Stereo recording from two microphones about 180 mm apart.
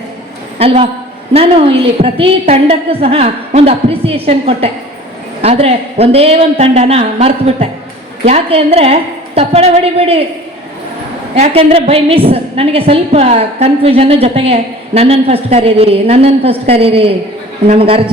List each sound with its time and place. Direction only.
0.6 s a woman's voice: 35° right (ahead or behind)
11.3 s a woman's voice: 35° right (ahead or behind)